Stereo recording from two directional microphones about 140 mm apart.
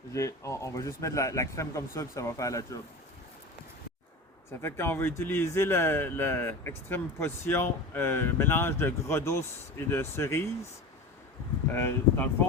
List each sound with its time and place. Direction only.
0.1 s a man's voice: 20° left (ahead or behind)
4.5 s a man's voice: 15° left (ahead or behind)
11.7 s speech: 15° left (ahead or behind)